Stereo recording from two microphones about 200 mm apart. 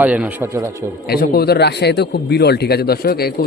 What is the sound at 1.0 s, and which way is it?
Speech, 50° left (ahead or behind).